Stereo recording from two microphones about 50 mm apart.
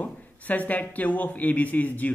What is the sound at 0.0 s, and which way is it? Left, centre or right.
A man's voice, left.